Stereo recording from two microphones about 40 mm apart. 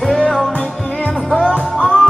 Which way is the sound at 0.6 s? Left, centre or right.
Left.